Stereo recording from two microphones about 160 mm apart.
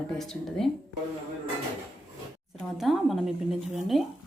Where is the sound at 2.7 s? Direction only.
Centre (ahead or behind).